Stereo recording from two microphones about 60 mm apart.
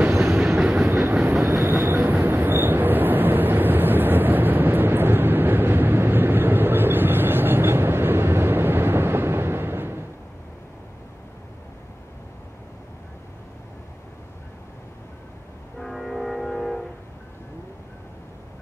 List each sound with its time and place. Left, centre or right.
0.2 s train: centre
0.8 s train: right
15.8 s train: centre